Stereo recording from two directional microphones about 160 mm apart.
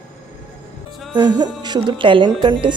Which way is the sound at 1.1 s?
25° right (ahead or behind).